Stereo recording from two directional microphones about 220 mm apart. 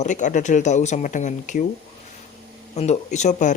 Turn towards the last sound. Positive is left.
turn(degrees=35)  # may be behind; listen again after turning